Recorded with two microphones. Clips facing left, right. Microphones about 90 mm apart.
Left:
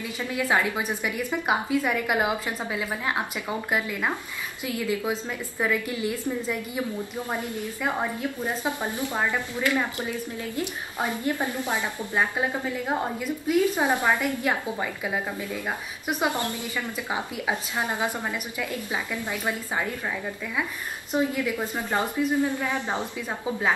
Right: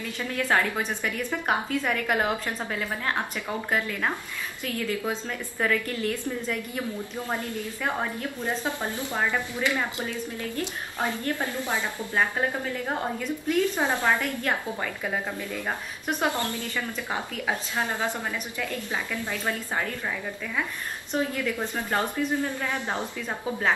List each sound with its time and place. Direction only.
0.2 s a woman's voice: 10° left (ahead or behind)
21.1 s a woman's voice: 10° left (ahead or behind)